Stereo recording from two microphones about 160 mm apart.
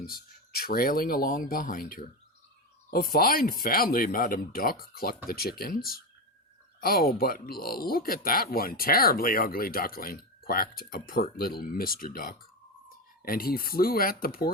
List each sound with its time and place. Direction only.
0.5 s speech: 70° left (ahead or behind)